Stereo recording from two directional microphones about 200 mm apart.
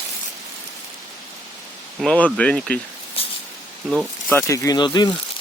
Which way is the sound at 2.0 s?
5° left (ahead or behind).